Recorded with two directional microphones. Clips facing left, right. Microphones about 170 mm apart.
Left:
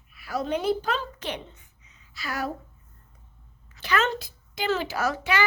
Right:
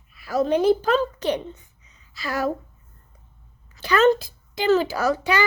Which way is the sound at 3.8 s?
35° right (ahead or behind).